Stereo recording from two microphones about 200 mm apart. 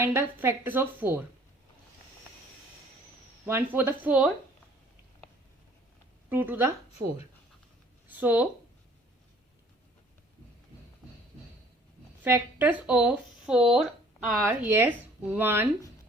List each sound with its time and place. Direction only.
0.0 s speech: 10° right (ahead or behind)
3.4 s speech: 10° right (ahead or behind)
6.2 s speech: 10° right (ahead or behind)
8.0 s speech: 10° right (ahead or behind)
12.2 s speech: 10° right (ahead or behind)